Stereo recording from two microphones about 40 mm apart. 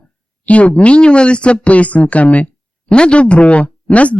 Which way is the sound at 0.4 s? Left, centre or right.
Left.